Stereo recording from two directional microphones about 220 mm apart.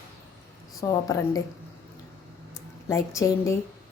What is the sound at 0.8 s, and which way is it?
Speech, 15° left (ahead or behind).